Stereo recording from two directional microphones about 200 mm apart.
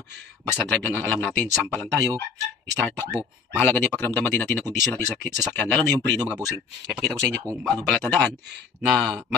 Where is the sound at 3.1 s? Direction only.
10° right (ahead or behind).